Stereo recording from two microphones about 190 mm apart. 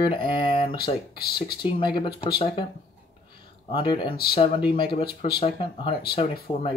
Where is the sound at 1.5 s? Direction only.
25° left (ahead or behind).